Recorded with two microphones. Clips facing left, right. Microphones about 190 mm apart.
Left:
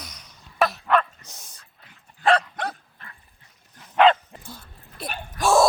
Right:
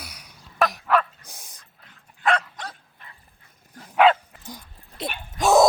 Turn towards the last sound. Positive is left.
turn(degrees=-20)  # may be behind; listen again after turning